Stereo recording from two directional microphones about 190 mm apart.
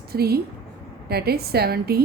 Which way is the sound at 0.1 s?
55° right (ahead or behind).